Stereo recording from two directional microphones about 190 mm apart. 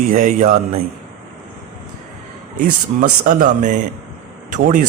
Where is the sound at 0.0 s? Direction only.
45° right (ahead or behind).